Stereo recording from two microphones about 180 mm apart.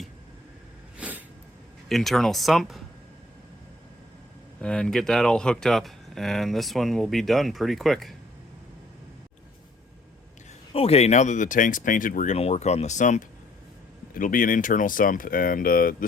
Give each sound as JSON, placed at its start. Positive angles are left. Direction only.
{"t": 0.9, "sound": "a sound", "side_deg": -10}
{"t": 1.9, "sound": "speech", "side_deg": 0}
{"t": 4.6, "sound": "speech", "side_deg": 5}
{"t": 10.8, "sound": "speech", "side_deg": 35}